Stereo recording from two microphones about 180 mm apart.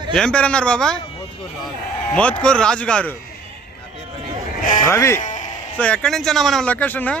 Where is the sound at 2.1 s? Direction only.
5° left (ahead or behind).